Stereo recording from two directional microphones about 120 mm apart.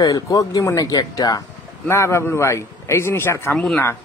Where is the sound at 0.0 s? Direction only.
30° left (ahead or behind).